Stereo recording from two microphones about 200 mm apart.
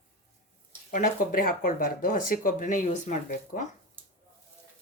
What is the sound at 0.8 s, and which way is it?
Speech, 40° left (ahead or behind).